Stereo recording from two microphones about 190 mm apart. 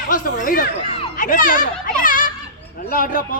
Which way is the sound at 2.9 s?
45° left (ahead or behind).